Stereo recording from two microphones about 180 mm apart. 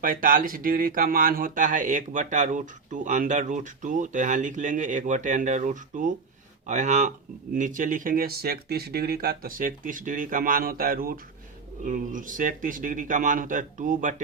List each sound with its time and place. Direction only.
0.0 s speech: 50° right (ahead or behind)